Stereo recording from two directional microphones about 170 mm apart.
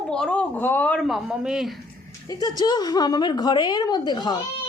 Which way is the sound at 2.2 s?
25° left (ahead or behind).